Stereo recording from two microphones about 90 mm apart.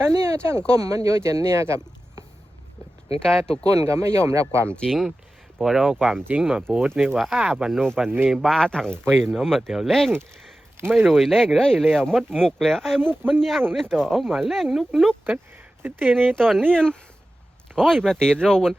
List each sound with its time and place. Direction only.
0.1 s speech: 30° right (ahead or behind)
3.6 s speech: 40° right (ahead or behind)
4.7 s speech: 10° left (ahead or behind)
5.5 s speech: 5° right (ahead or behind)
8.5 s speech: 5° left (ahead or behind)
15.8 s speech: 20° right (ahead or behind)
16.3 s speech: 5° left (ahead or behind)